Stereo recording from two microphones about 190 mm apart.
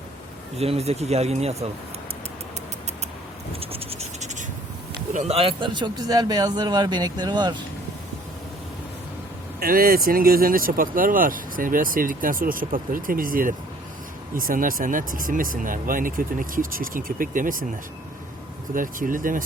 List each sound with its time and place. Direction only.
0.5 s speech: 35° right (ahead or behind)
3.5 s scratch: 30° right (ahead or behind)
5.1 s a man's voice: 35° right (ahead or behind)
9.6 s speech: 50° right (ahead or behind)
18.7 s speech: 45° right (ahead or behind)